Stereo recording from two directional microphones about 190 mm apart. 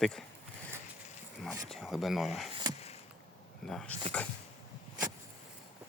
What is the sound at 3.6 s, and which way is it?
Speech, centre (ahead or behind).